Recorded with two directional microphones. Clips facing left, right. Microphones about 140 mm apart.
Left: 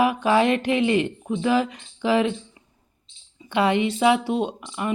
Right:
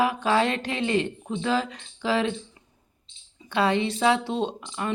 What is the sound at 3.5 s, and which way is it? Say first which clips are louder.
Speech: left 3 dB; 15° left (ahead or behind).